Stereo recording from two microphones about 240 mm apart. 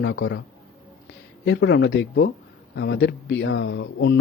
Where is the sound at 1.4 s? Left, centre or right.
Left.